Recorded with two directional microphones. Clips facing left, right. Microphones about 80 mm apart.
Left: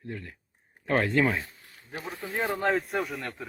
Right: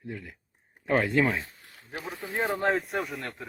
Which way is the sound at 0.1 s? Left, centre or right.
Centre.